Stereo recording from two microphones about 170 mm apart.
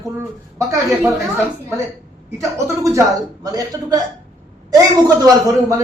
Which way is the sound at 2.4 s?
20° right (ahead or behind).